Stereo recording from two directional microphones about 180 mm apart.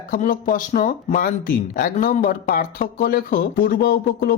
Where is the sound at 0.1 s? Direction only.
50° left (ahead or behind).